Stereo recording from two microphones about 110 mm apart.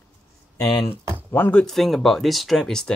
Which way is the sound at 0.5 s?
20° left (ahead or behind).